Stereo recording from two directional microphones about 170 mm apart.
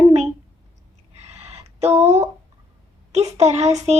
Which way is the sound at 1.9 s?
40° right (ahead or behind).